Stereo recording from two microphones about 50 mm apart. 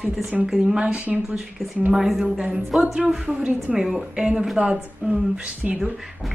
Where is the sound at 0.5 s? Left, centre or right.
Centre.